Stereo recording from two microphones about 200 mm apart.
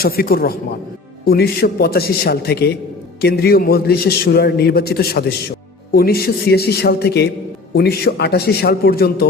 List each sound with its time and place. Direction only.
0.0 s a man's voice: 50° left (ahead or behind)